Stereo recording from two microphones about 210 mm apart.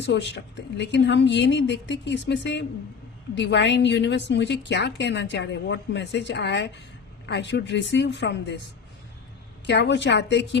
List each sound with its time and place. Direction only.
0.0 s a woman's voice: 55° left (ahead or behind)
9.6 s a woman's voice: 55° left (ahead or behind)